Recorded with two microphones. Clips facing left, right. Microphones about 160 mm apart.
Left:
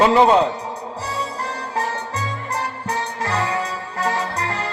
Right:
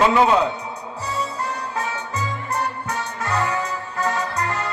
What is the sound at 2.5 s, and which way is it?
Music, 30° left (ahead or behind).